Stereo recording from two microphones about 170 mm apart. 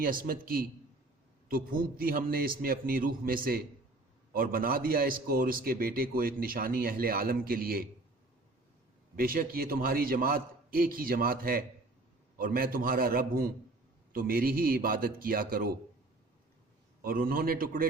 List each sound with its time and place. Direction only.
0.0 s a man's voice: 55° right (ahead or behind)
9.1 s a man's voice: 60° right (ahead or behind)
17.0 s a man's voice: 60° right (ahead or behind)